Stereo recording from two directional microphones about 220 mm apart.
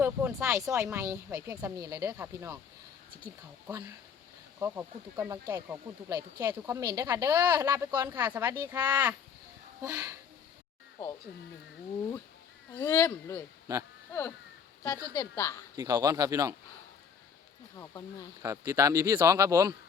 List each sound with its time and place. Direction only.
0.0 s speech: 10° right (ahead or behind)
4.6 s speech: 10° right (ahead or behind)
12.7 s speech: 10° left (ahead or behind)
13.7 s speech: 15° right (ahead or behind)
14.1 s speech: 10° left (ahead or behind)
14.9 s speech: 15° right (ahead or behind)
15.2 s speech: 10° left (ahead or behind)
15.7 s speech: 15° right (ahead or behind)
17.7 s speech: 15° left (ahead or behind)
18.4 s speech: 15° right (ahead or behind)